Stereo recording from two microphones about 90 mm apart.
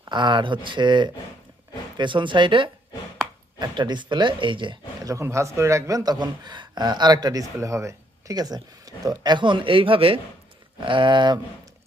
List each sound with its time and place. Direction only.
0.1 s speech: 60° right (ahead or behind)
5.0 s speech: 35° right (ahead or behind); by 10.2 s 85° right
10.8 s speech: 65° right (ahead or behind)